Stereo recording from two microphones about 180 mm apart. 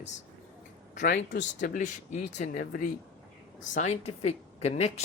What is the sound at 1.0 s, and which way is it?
Speech, 70° left (ahead or behind).